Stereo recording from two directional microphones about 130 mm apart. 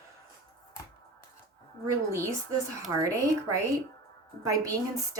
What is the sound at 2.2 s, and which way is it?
A woman's voice, 25° right (ahead or behind).